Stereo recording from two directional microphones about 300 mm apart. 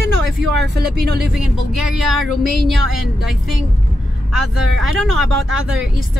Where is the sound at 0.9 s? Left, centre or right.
Right.